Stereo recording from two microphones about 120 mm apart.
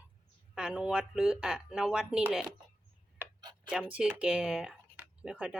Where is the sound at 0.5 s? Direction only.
5° right (ahead or behind).